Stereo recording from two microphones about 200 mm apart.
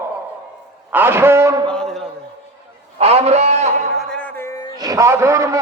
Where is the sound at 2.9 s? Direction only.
30° right (ahead or behind).